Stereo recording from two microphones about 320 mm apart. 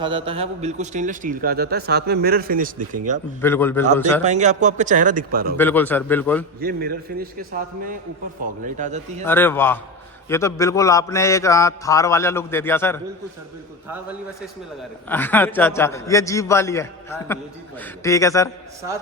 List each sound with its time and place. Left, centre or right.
0.0 s speech: centre
3.4 s a man's voice: centre
4.2 s speech: right
5.5 s a man's voice: centre
6.6 s speech: right
8.6 s speech: right
9.2 s a man's voice: centre
15.1 s a man's voice: centre